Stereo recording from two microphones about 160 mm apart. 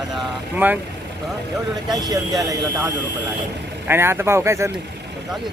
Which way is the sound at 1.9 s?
25° right (ahead or behind).